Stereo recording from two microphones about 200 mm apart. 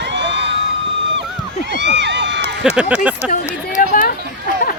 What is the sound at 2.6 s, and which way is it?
Speech, 5° right (ahead or behind).